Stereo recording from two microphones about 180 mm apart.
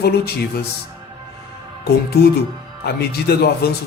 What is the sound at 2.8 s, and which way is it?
Speech, 60° left (ahead or behind).